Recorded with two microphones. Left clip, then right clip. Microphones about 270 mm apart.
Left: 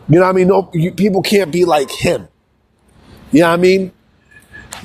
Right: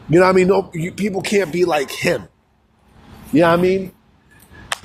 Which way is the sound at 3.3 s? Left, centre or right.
Left.